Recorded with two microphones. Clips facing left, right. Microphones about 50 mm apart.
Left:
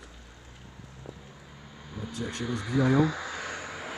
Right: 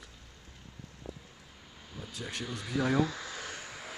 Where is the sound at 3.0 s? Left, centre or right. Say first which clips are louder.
Left 6 dB; left.